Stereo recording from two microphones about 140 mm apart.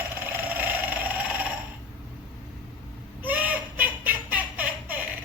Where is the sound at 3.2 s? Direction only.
10° right (ahead or behind).